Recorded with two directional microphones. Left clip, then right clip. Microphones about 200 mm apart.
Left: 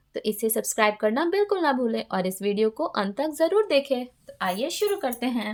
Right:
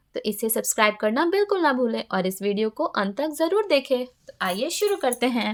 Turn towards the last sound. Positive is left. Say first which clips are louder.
# right 5 dB
turn(degrees=-45)  # may be behind; listen again after turning